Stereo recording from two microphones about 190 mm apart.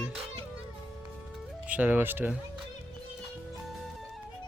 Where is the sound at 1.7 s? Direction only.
10° right (ahead or behind).